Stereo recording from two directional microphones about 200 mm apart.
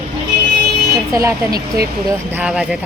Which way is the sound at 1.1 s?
15° right (ahead or behind).